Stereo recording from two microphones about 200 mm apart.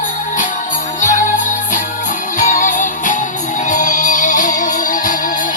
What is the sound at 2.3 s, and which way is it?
Music, 40° left (ahead or behind).